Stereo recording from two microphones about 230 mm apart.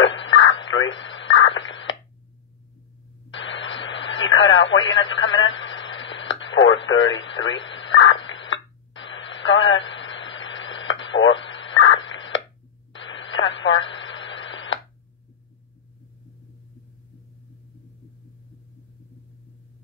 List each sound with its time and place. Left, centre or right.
0.0 s radio: left
3.3 s radio: left